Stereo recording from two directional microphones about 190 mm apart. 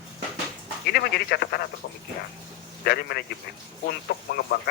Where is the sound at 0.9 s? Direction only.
55° left (ahead or behind).